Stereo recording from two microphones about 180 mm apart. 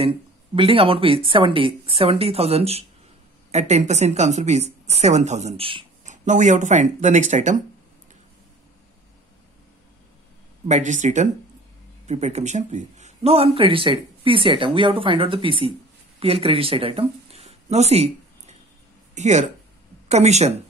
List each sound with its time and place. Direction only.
0.6 s a woman's voice: 30° right (ahead or behind)
6.0 s speech: 45° right (ahead or behind)
10.7 s a woman's voice: 45° right (ahead or behind)
19.1 s a woman's voice: 40° right (ahead or behind)